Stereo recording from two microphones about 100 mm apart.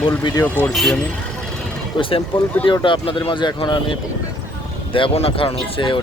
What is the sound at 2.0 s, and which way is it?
Speech, 60° left (ahead or behind).